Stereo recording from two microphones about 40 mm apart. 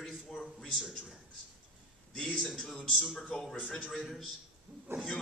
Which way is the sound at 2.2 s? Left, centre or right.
Left.